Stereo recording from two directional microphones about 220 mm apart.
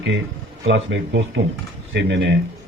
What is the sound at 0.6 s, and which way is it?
A man's voice, 60° right (ahead or behind).